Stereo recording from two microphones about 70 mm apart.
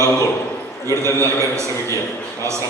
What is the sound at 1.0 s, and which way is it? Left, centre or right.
Speech, right.